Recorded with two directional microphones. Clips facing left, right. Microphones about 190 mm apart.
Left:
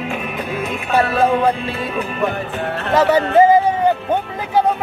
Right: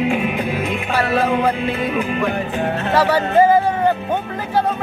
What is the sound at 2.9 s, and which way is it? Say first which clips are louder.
Speech: left 3 dB; 20° left (ahead or behind).